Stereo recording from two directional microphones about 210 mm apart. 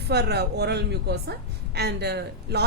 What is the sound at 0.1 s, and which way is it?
A woman's voice, 50° right (ahead or behind).